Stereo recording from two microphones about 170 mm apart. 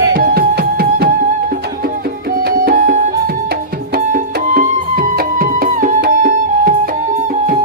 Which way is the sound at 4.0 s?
55° right (ahead or behind).